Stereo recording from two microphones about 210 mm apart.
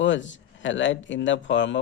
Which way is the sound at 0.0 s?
60° left (ahead or behind).